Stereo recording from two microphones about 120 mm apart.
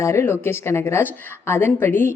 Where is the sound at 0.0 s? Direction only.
25° left (ahead or behind).